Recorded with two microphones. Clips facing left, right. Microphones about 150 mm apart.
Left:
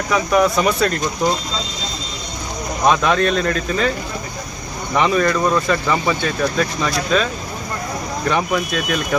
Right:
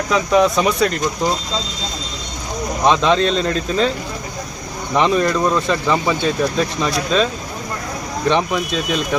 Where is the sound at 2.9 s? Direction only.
25° right (ahead or behind).